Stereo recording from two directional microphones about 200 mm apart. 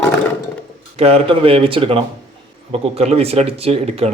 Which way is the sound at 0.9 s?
30° right (ahead or behind).